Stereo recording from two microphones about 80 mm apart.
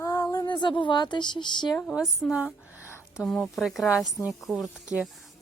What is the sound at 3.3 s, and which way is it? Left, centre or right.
Speech, centre.